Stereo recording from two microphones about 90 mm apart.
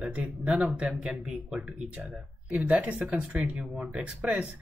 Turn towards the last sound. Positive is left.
turn(degrees=-15)  # may be behind; listen again after turning